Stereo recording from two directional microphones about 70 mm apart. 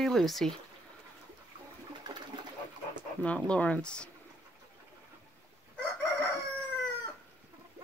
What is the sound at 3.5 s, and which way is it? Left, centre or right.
Speech, centre.